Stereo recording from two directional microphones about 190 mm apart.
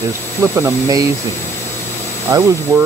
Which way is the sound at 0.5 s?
15° right (ahead or behind).